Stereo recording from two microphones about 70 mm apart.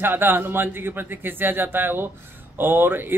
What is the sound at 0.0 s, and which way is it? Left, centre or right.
Speech, right.